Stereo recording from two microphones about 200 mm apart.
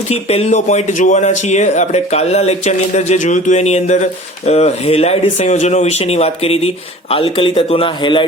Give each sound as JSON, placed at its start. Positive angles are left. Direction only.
{"t": 0.1, "sound": "speech", "side_deg": 30}